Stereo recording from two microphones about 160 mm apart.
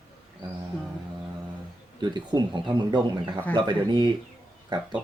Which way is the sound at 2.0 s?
25° right (ahead or behind).